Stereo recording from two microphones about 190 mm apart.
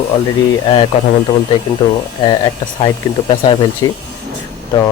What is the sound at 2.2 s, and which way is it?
Speech, 25° left (ahead or behind).